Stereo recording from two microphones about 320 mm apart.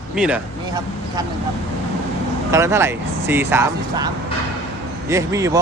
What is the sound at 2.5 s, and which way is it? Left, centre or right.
Speech, centre.